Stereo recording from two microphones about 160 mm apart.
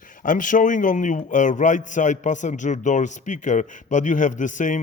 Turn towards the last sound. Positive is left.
turn(degrees=50)  # may be behind; listen again after turning